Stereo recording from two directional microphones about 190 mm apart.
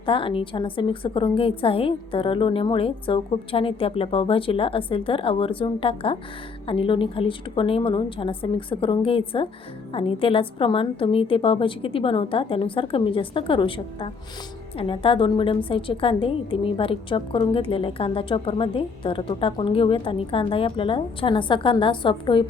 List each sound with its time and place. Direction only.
0.0 s a woman's voice: 25° left (ahead or behind)